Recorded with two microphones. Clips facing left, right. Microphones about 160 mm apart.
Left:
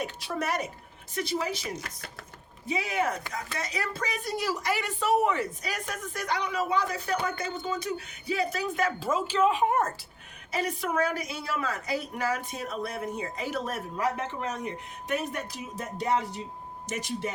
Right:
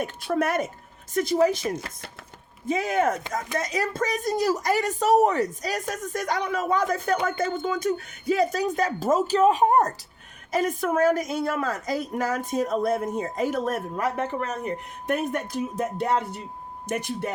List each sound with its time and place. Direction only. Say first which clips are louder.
0.0 s speech: right 7 dB; 55° right (ahead or behind)